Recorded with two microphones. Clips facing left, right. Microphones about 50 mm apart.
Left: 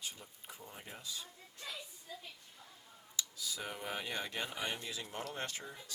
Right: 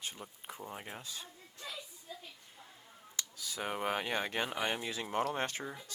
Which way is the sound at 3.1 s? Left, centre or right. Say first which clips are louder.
Even; right.